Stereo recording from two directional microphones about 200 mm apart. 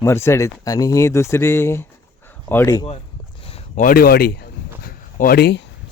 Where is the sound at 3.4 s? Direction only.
35° left (ahead or behind); by 5.7 s 55° left (ahead or behind).